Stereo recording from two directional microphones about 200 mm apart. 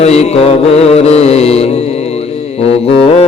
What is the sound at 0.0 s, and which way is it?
Music, 30° left (ahead or behind).